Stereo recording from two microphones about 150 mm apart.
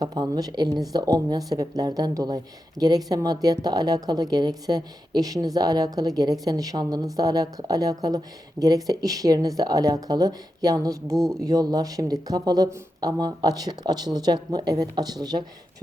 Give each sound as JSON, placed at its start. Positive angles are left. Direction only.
{"t": 0.0, "sound": "speech", "side_deg": -25}